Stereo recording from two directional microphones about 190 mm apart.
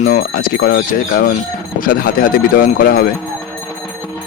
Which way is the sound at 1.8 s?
45° left (ahead or behind).